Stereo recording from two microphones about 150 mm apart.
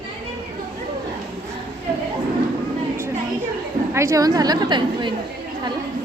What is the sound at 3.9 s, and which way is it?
A woman's voice, 20° right (ahead or behind).